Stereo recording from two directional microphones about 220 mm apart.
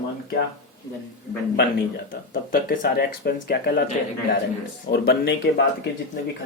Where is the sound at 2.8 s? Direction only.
45° left (ahead or behind).